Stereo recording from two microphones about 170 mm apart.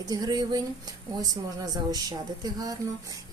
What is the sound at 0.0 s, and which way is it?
A woman's voice, 20° right (ahead or behind).